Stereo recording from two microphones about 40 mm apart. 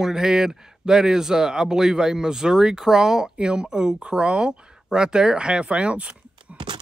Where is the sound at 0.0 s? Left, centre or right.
Centre.